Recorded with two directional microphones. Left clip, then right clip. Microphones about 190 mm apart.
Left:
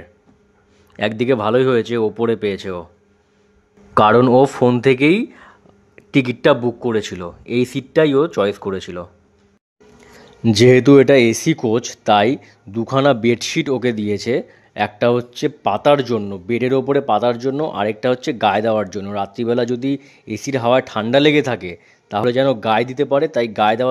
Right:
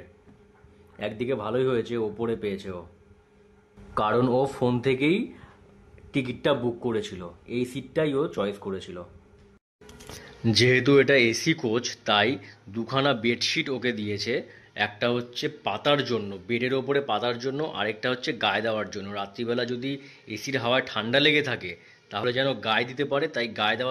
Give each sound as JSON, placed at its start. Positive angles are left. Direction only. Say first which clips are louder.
{"t": 0.9, "sound": "speech", "louder": "left 12 dB", "side_deg": 40}
{"t": 3.9, "sound": "speech", "louder": "left 12 dB", "side_deg": 40}
{"t": 10.8, "sound": "speech", "louder": "left 9 dB", "side_deg": 45}